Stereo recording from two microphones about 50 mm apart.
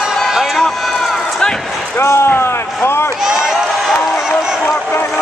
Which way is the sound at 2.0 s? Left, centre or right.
Left.